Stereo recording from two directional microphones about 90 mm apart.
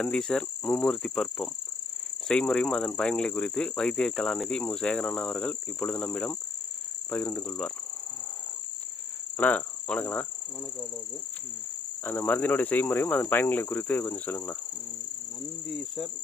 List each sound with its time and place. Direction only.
0.0 s speech: 5° left (ahead or behind)
9.4 s speech: 15° left (ahead or behind)
12.0 s cricket: 20° left (ahead or behind)
15.6 s speech: centre (ahead or behind)